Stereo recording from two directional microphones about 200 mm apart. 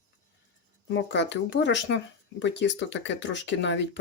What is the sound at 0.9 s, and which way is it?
Speech, 65° left (ahead or behind).